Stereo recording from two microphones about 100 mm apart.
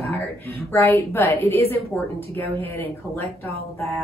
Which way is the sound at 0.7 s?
25° left (ahead or behind).